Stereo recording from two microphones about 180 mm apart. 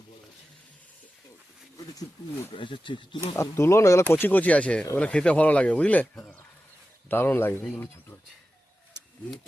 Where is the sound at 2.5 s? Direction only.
25° left (ahead or behind).